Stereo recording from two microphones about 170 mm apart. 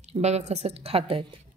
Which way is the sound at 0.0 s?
40° right (ahead or behind).